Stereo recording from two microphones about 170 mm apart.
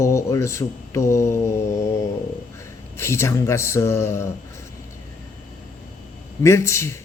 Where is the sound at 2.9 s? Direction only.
15° left (ahead or behind).